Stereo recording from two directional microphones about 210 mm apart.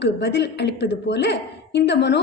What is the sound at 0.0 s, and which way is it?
A woman's voice, 55° left (ahead or behind).